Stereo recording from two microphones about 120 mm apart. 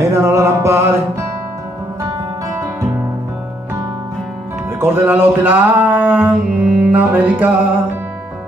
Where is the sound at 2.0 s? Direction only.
30° right (ahead or behind).